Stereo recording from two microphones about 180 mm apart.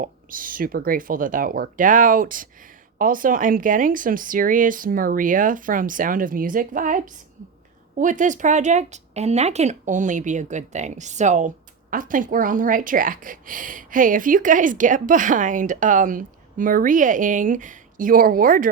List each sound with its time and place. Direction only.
0.0 s speech: 50° right (ahead or behind)